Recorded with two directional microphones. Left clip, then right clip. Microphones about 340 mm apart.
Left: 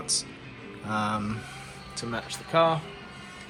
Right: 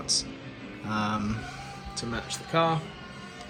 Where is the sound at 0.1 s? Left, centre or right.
Centre.